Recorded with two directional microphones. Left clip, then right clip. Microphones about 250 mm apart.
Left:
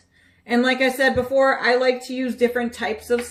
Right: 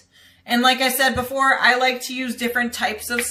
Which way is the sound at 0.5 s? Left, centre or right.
Right.